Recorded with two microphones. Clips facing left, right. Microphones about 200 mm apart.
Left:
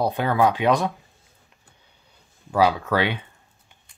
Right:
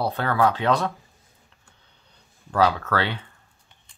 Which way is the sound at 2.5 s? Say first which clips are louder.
Left 2 dB; 10° left (ahead or behind).